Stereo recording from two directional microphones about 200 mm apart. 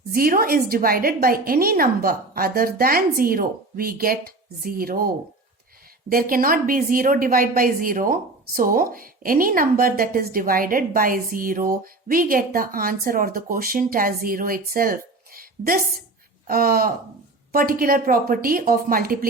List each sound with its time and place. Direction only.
0.1 s a woman's voice: 45° right (ahead or behind)